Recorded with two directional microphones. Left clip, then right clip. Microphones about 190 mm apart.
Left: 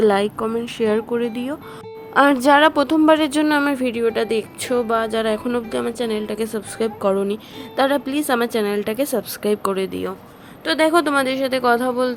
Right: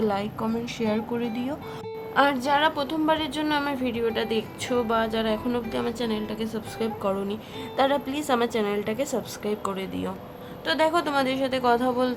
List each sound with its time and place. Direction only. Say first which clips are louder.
0.0 s a woman's voice: left 10 dB; 30° left (ahead or behind)
2.1 s a woman's voice: left 8 dB; 40° left (ahead or behind); by 12.1 s 20° left (ahead or behind)